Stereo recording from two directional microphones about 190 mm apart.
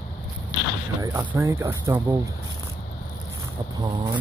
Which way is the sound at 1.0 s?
15° right (ahead or behind).